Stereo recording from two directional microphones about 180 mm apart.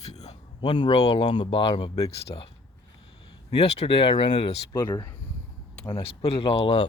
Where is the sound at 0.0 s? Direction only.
35° left (ahead or behind).